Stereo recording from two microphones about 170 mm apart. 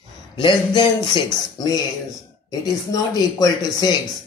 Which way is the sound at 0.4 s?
25° left (ahead or behind).